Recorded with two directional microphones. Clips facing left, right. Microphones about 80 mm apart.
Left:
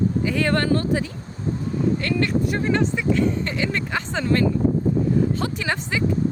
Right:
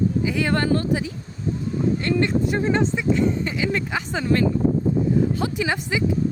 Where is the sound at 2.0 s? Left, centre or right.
Right.